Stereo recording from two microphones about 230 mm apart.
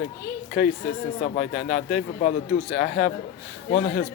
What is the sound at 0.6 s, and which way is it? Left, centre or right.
Speech, left.